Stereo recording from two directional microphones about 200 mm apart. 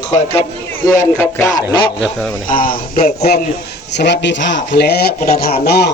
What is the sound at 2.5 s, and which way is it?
Speech, 45° left (ahead or behind).